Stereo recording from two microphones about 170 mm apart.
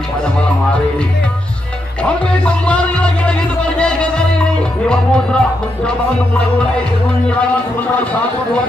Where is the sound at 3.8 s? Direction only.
5° left (ahead or behind).